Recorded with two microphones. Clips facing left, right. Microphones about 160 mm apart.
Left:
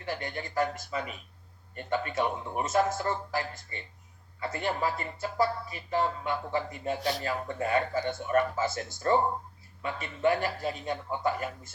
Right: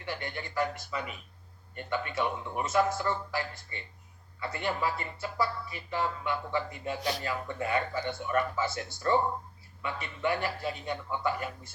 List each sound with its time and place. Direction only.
0.0 s speech: 45° left (ahead or behind)